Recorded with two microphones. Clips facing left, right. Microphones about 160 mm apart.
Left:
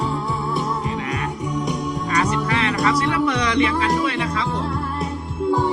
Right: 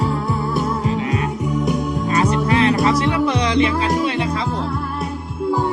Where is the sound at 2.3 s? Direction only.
30° right (ahead or behind).